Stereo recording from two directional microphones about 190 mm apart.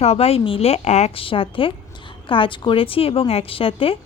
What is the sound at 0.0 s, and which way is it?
A woman's voice, 35° left (ahead or behind).